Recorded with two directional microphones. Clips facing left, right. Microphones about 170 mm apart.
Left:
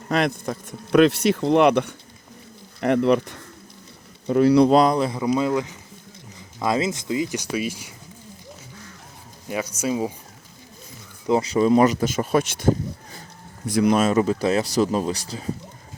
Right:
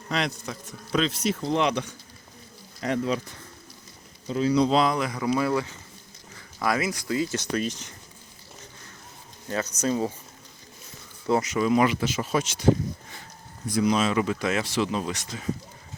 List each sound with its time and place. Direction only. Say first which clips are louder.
0.1 s a man's voice: left 7 dB; 50° left (ahead or behind)
4.7 s speech: left 6 dB; 40° left (ahead or behind); by 7.9 s 10° left (ahead or behind)
9.5 s speech: left 2 dB; 10° left (ahead or behind)
11.3 s speech: left 5 dB; 25° left (ahead or behind); by 12.7 s 55° left (ahead or behind)
13.7 s speech: left 4 dB; 80° left
13.9 s speech: left 5 dB; 45° left (ahead or behind)